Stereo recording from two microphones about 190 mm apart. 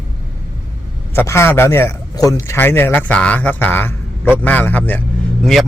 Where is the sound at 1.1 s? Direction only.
15° left (ahead or behind).